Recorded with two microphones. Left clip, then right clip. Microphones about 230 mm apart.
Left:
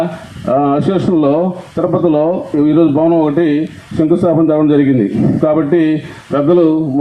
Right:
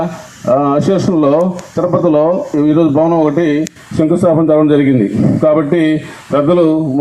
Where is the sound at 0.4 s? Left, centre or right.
Right.